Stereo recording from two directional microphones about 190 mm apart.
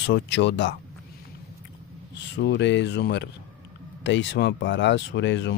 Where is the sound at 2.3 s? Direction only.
65° left (ahead or behind).